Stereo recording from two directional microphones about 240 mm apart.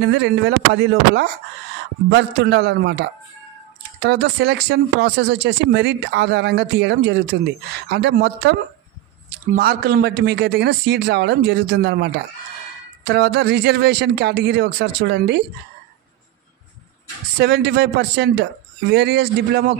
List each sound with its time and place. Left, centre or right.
0.0 s speech: right
17.4 s speech: right